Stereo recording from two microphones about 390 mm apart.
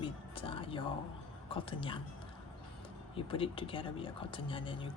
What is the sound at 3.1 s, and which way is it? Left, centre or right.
Speech, centre.